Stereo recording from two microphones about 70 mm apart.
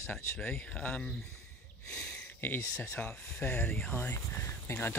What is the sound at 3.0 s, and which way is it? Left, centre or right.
Speech, left.